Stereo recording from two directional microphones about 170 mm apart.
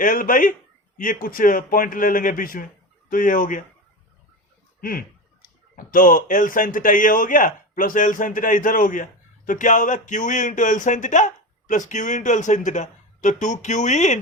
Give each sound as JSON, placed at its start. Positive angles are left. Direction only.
{"t": 0.0, "sound": "a man's voice", "side_deg": 50}
{"t": 4.8, "sound": "a man's voice", "side_deg": 60}